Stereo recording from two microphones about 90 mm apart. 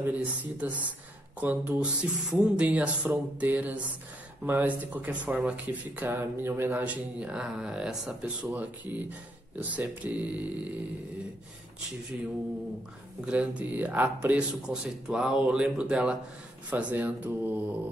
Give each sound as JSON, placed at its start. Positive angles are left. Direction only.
{"t": 0.0, "sound": "speech", "side_deg": -15}
{"t": 6.0, "sound": "speech", "side_deg": -25}
{"t": 13.2, "sound": "speech", "side_deg": -15}
{"t": 14.7, "sound": "speech", "side_deg": -10}